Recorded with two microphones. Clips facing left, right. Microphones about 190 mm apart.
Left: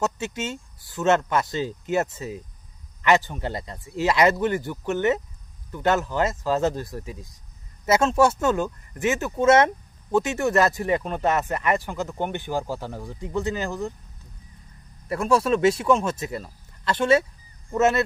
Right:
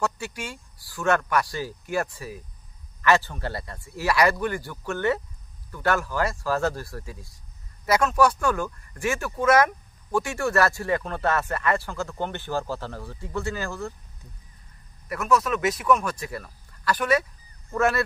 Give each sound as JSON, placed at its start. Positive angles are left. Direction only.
{"t": 0.0, "sound": "speech", "side_deg": 20}
{"t": 15.0, "sound": "speech", "side_deg": 30}